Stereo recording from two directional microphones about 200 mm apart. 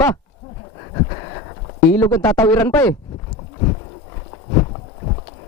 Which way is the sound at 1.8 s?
10° left (ahead or behind).